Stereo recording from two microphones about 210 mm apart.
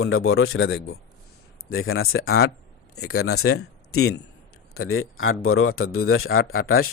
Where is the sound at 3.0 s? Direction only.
90° left.